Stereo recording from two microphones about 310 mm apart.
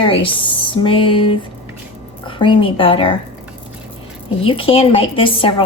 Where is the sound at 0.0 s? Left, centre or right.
Centre.